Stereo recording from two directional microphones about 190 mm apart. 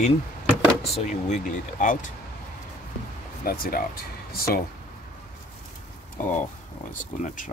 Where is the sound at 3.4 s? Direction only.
50° left (ahead or behind).